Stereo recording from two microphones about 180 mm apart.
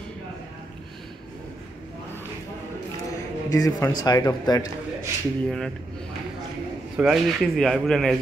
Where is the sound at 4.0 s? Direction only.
20° left (ahead or behind).